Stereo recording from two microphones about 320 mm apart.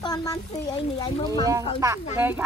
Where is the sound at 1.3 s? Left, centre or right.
Centre.